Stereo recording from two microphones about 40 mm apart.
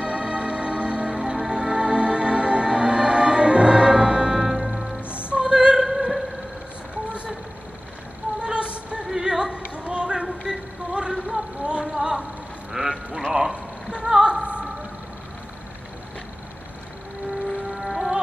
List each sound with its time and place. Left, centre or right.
0.0 s music: right
4.4 s music: centre
5.3 s opera: right
5.8 s music: centre
7.1 s vehicle: right
8.4 s a sound: right
9.1 s music: centre
9.8 s a sound: right
12.7 s sheep: centre
13.3 s a sound: centre
14.2 s music: right
17.6 s music: centre